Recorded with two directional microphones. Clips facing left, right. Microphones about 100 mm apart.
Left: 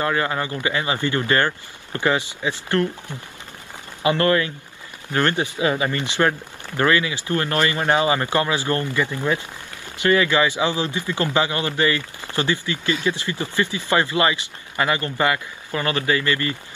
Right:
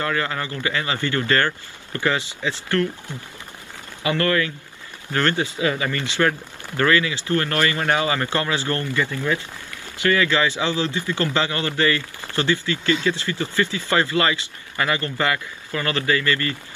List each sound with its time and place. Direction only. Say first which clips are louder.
0.0 s a man's voice: left 2 dB; 25° left (ahead or behind)